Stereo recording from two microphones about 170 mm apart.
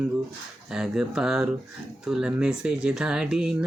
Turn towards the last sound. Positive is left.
turn(degrees=-5)  # may be behind; listen again after turning